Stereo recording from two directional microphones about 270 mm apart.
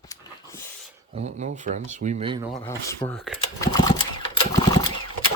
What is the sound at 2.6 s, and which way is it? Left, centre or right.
Speech, centre.